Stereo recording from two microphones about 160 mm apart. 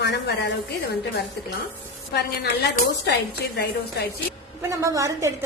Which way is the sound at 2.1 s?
70° left (ahead or behind).